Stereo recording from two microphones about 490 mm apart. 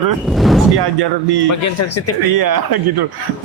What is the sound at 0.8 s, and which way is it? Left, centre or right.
Speech, right.